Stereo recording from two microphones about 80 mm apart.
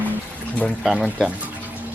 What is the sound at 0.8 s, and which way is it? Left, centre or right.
Speech, centre.